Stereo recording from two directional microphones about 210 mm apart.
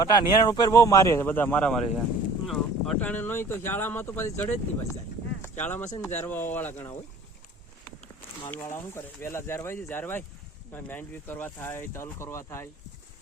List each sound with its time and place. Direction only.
0.0 s speech: 20° left (ahead or behind)